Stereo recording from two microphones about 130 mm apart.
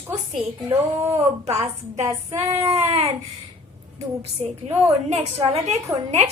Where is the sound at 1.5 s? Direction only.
60° right (ahead or behind).